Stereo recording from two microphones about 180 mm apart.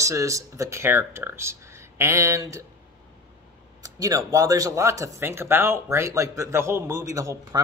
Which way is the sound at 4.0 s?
20° right (ahead or behind).